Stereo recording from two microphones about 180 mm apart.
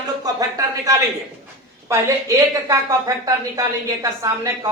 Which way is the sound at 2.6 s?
20° right (ahead or behind).